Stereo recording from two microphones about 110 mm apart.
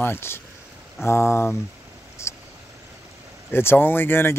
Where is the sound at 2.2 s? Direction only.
25° left (ahead or behind).